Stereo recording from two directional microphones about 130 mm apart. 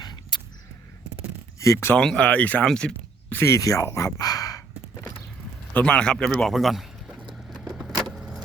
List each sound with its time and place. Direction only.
0.0 s a sound: 35° left (ahead or behind)
1.5 s speech: 25° left (ahead or behind)
2.0 s speech: 5° left (ahead or behind)
3.4 s speech: 25° left (ahead or behind)
5.7 s a sound: 10° left (ahead or behind)
7.6 s vehicle: 5° right (ahead or behind)